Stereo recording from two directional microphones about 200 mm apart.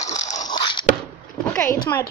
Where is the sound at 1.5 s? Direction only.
10° left (ahead or behind).